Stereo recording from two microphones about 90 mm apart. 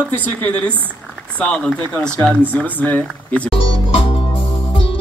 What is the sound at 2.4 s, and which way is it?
Speech, 20° left (ahead or behind).